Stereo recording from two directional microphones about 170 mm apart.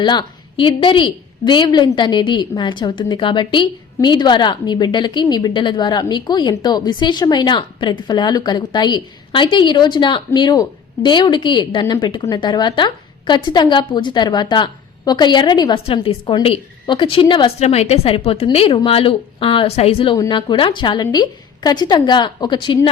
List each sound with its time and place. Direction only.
0.0 s a woman's voice: 25° left (ahead or behind)
20.1 s a woman's voice: 25° left (ahead or behind)